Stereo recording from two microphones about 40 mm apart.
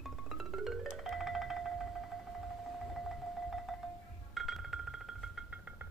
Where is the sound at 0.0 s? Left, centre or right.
Centre.